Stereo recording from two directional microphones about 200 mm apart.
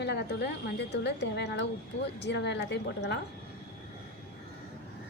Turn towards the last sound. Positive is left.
turn(degrees=55)  # may be behind; listen again after turning